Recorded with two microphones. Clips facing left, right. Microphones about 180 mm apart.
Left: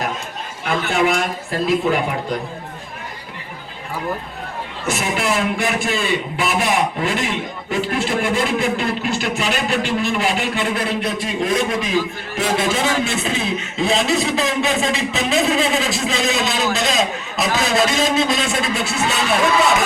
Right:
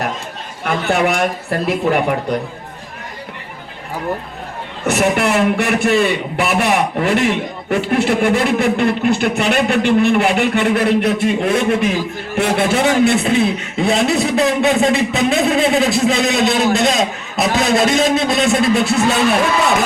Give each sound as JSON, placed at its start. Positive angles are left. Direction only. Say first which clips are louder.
{"t": 0.9, "sound": "a man's voice", "louder": "right 3 dB", "side_deg": -60}
{"t": 4.9, "sound": "a man's voice", "louder": "right 6 dB", "side_deg": -65}